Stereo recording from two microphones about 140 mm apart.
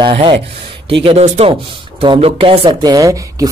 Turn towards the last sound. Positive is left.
turn(degrees=-25)  # may be behind; listen again after turning